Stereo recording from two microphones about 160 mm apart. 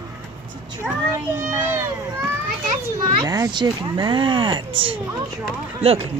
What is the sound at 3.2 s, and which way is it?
Speech, 20° right (ahead or behind).